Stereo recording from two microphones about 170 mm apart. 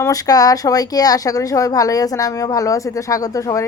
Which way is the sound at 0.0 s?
20° left (ahead or behind).